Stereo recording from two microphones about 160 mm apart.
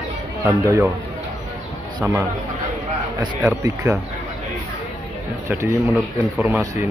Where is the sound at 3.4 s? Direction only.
15° right (ahead or behind).